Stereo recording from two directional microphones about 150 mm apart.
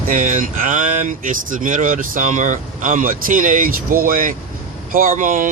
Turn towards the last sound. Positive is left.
turn(degrees=-60)  # may be behind; listen again after turning